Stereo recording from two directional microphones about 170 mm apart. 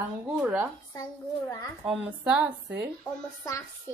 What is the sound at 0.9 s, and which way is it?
Speech, 20° left (ahead or behind).